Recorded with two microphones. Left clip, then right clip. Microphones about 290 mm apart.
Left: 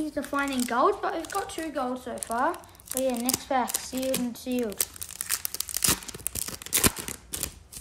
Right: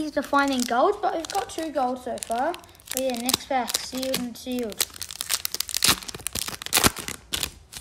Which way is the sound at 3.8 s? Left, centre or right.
Centre.